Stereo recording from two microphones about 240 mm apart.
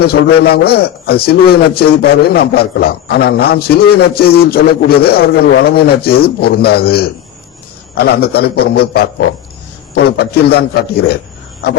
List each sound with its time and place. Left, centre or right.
0.0 s a man's voice: left